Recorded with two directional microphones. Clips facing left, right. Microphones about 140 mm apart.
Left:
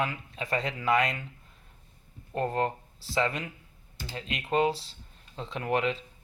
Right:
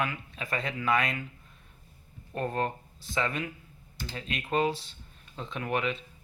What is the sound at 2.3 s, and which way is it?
Speech, 25° left (ahead or behind).